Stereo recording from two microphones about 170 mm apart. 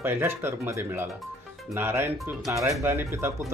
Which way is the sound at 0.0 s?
15° right (ahead or behind).